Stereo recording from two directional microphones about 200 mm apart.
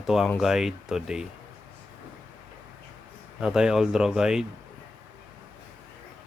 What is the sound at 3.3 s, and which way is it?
Speech, 5° right (ahead or behind).